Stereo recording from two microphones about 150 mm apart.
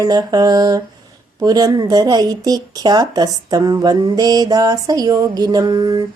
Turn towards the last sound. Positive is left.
turn(degrees=-30)  # may be behind; listen again after turning